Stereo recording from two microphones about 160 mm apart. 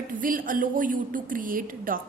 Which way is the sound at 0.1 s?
60° right (ahead or behind).